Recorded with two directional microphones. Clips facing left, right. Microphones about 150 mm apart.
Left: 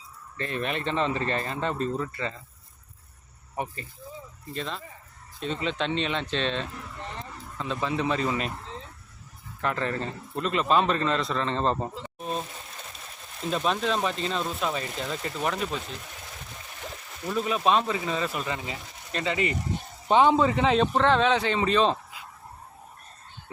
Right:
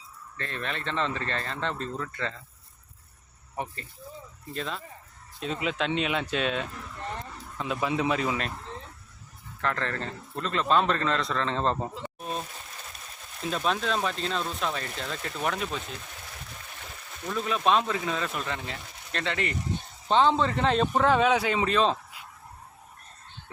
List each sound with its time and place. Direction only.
0.3 s speech: 15° left (ahead or behind)
3.5 s speech: 10° left (ahead or behind)
9.6 s speech: 10° left (ahead or behind)
13.5 s speech: centre (ahead or behind)
17.2 s speech: 5° left (ahead or behind)